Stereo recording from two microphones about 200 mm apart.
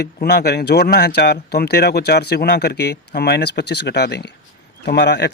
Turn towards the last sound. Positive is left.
turn(degrees=60)  # may be behind; listen again after turning